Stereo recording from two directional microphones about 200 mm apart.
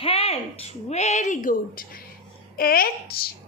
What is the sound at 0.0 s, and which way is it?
A woman's voice, 30° left (ahead or behind).